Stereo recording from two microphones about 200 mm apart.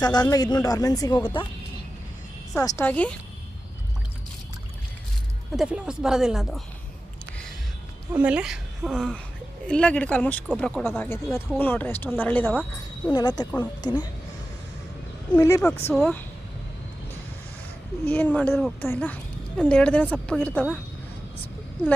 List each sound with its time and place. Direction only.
0.0 s speech: 20° left (ahead or behind)
2.6 s speech: 15° left (ahead or behind)
5.5 s a woman's voice: 5° right (ahead or behind)
8.1 s a woman's voice: 5° right (ahead or behind)
13.1 s speech: 20° left (ahead or behind)
15.3 s speech: 15° left (ahead or behind)
18.1 s a woman's voice: 10° left (ahead or behind)